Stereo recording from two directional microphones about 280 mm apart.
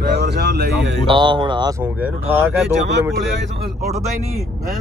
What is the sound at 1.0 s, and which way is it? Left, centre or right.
Speech, centre.